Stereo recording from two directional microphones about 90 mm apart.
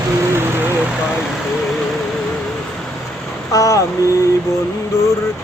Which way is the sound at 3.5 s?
35° left (ahead or behind).